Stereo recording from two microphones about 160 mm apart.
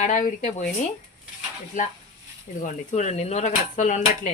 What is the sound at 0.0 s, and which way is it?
Speech, 55° left (ahead or behind).